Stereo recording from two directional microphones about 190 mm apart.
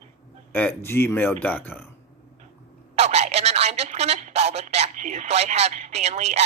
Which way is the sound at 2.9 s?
35° right (ahead or behind).